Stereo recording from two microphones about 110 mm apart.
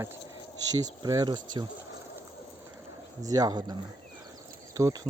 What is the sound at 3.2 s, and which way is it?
Speech, 35° right (ahead or behind).